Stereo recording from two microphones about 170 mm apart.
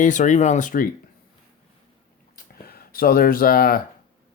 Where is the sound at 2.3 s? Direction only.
60° left (ahead or behind).